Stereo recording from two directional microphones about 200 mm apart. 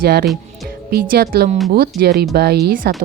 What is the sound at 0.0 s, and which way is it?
A woman's voice, 50° right (ahead or behind).